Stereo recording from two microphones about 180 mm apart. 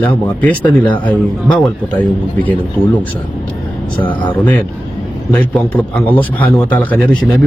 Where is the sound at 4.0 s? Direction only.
25° left (ahead or behind).